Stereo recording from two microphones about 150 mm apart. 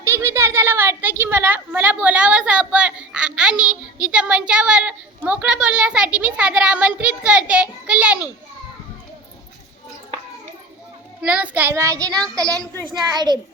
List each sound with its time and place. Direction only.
0.0 s a woman's voice: 15° right (ahead or behind)
11.2 s a woman's voice: 10° right (ahead or behind); by 13.4 s 30° right (ahead or behind)